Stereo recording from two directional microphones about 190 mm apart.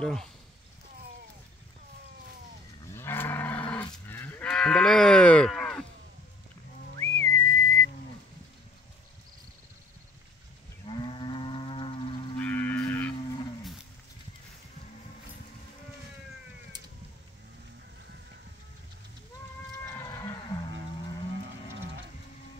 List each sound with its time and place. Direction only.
0.0 s speech: 5° left (ahead or behind)
2.9 s moo: 10° left (ahead or behind)
7.0 s whistling: 10° left (ahead or behind)
10.9 s moo: 25° left (ahead or behind)
12.4 s music: 10° left (ahead or behind)
19.8 s livestock: 15° left (ahead or behind)
21.3 s livestock: 70° right (ahead or behind)